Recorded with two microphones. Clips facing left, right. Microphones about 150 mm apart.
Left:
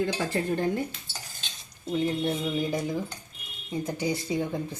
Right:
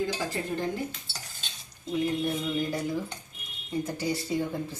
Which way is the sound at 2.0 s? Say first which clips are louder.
Left 1 dB; 25° left (ahead or behind).